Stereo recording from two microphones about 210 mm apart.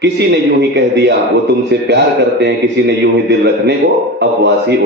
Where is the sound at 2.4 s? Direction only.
55° right (ahead or behind).